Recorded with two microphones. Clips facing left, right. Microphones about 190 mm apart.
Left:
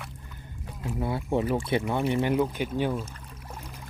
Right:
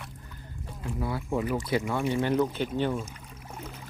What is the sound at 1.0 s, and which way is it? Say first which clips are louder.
Speech: left 3 dB; 25° left (ahead or behind).